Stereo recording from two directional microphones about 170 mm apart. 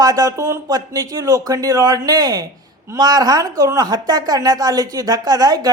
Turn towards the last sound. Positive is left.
turn(degrees=-20)  # may be behind; listen again after turning